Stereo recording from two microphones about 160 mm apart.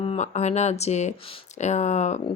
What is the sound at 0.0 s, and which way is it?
Speech, 40° left (ahead or behind).